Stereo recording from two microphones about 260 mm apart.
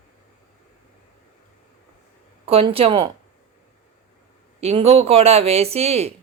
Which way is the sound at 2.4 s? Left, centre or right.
Right.